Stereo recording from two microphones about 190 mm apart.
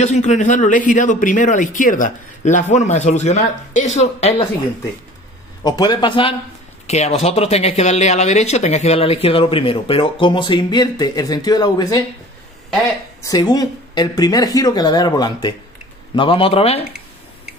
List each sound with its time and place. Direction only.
0.0 s speech: 40° left (ahead or behind)
5.6 s speech: 20° left (ahead or behind)
13.2 s speech: 20° left (ahead or behind)